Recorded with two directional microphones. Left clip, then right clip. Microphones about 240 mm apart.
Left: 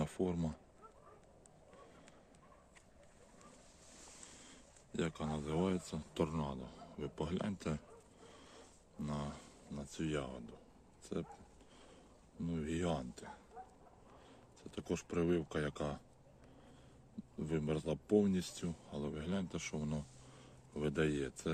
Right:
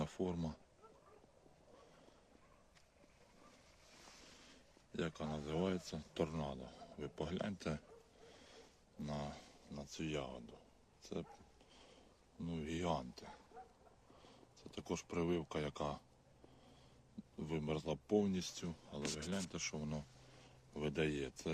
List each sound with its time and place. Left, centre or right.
0.0 s speech: centre
4.9 s speech: centre
9.0 s speech: centre
12.4 s speech: centre
13.6 s a sound: right
14.6 s speech: centre
17.4 s speech: centre